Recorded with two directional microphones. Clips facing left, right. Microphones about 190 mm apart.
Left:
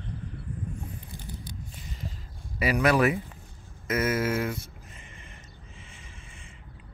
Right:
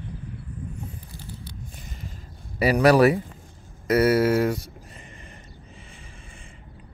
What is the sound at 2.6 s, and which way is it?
Speech, 35° right (ahead or behind).